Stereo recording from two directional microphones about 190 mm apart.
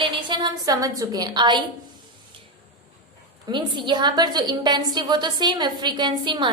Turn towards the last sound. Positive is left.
turn(degrees=-25)  # may be behind; listen again after turning